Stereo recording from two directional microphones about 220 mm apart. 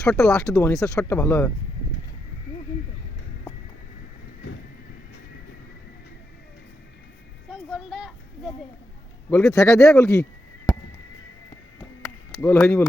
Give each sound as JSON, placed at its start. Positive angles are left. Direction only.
{"t": 0.1, "sound": "a man's voice", "side_deg": 5}
{"t": 4.4, "sound": "vehicle", "side_deg": 90}
{"t": 7.7, "sound": "a sound", "side_deg": -5}
{"t": 9.3, "sound": "a man's voice", "side_deg": 5}
{"t": 10.0, "sound": "speech", "side_deg": 15}
{"t": 12.4, "sound": "speech", "side_deg": 5}